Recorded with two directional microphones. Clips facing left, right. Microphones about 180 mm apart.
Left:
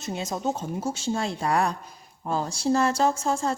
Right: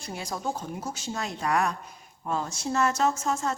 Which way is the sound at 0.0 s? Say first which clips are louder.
Left 4 dB; 20° left (ahead or behind).